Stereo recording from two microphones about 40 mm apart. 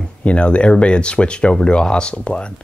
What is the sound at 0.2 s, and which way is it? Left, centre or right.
Speech, left.